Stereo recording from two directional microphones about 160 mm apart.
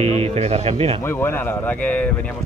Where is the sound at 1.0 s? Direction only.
15° left (ahead or behind).